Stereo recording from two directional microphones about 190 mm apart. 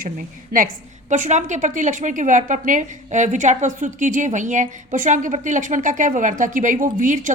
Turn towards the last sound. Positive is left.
turn(degrees=-45)  # may be behind; listen again after turning